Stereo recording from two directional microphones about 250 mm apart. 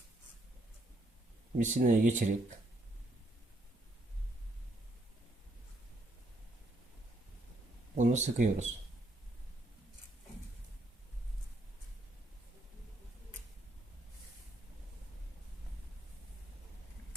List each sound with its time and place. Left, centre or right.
1.5 s speech: right
7.9 s speech: right